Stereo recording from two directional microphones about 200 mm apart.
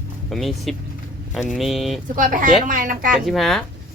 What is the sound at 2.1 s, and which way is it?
A woman's voice, 40° right (ahead or behind).